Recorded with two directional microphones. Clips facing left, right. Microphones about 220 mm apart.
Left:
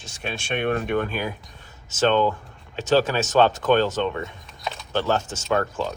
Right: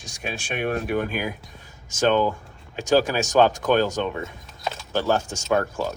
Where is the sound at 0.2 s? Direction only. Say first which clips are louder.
Left 1 dB; 5° right (ahead or behind).